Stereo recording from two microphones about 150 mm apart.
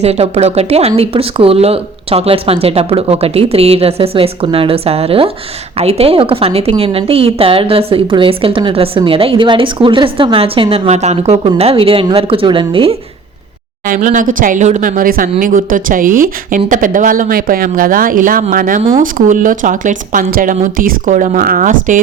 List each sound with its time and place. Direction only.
0.0 s a woman's voice: 45° right (ahead or behind)
13.8 s speech: 60° right (ahead or behind)